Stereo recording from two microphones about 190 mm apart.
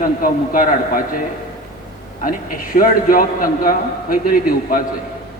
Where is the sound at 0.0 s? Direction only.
45° left (ahead or behind).